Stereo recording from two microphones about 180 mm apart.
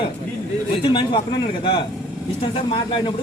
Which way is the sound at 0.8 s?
30° left (ahead or behind).